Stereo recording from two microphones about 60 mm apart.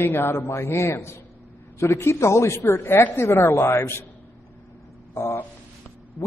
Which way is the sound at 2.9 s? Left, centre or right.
Left.